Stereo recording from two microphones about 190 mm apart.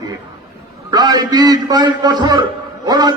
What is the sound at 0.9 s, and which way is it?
A man's voice, 20° right (ahead or behind).